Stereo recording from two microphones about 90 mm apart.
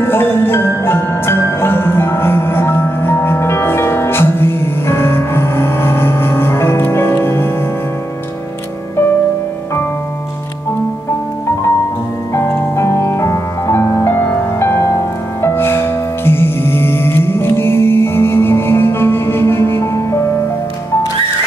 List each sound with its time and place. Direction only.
0.0 s music: 25° left (ahead or behind)
12.4 s music: 35° left (ahead or behind)